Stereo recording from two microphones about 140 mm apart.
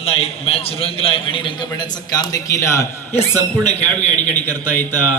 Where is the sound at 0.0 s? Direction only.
45° left (ahead or behind); by 3.2 s 20° left (ahead or behind).